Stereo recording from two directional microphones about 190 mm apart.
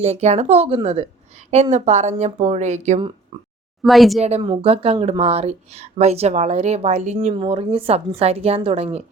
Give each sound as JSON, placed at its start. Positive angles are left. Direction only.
{"t": 0.0, "sound": "speech", "side_deg": -35}
{"t": 3.8, "sound": "speech", "side_deg": 0}
{"t": 4.2, "sound": "speech", "side_deg": -35}